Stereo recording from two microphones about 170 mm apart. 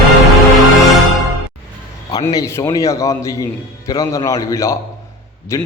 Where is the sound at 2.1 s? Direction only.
20° left (ahead or behind).